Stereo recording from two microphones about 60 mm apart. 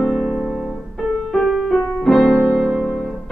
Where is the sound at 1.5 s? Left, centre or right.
Centre.